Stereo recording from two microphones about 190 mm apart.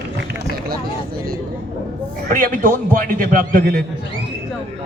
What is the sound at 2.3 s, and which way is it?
A man's voice, 45° right (ahead or behind).